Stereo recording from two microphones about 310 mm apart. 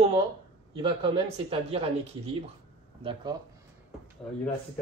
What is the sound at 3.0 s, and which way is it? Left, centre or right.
Speech, centre.